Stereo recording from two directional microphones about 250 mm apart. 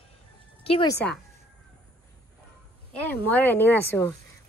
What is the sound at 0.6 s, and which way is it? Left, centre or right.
Speech, left.